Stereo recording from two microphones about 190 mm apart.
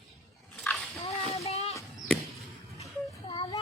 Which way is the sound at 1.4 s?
35° left (ahead or behind).